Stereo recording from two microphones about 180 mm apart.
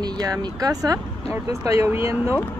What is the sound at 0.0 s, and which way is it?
Speech, 20° right (ahead or behind).